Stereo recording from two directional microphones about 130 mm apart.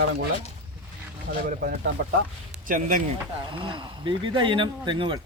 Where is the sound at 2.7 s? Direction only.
90° right.